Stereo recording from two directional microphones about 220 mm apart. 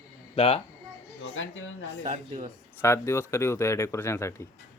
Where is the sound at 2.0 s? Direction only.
30° right (ahead or behind).